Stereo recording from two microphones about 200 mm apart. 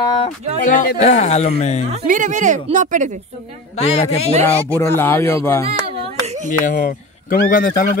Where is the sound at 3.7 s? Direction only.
30° left (ahead or behind).